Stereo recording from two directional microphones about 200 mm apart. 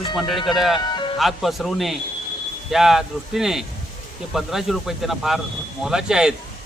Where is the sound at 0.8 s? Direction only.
20° left (ahead or behind).